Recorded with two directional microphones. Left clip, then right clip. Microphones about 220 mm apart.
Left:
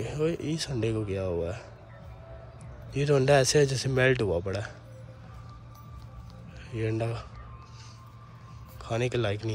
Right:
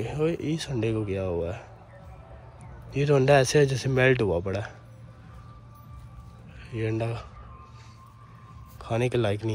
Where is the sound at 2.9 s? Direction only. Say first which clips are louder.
Right 2 dB; 5° left (ahead or behind).